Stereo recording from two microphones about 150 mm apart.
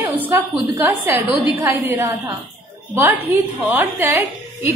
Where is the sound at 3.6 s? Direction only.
15° right (ahead or behind).